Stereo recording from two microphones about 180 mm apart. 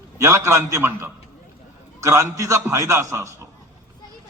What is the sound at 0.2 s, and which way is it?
A man's voice, 15° right (ahead or behind).